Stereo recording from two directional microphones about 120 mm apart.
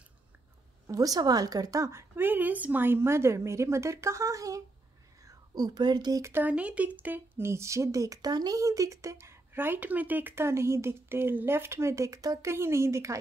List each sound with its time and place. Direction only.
0.8 s speech: 30° right (ahead or behind)
6.2 s speech: 15° right (ahead or behind)